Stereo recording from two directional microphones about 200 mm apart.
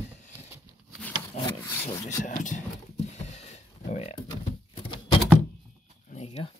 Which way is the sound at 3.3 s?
35° left (ahead or behind).